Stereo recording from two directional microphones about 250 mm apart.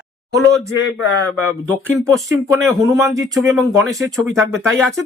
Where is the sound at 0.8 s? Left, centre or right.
Left.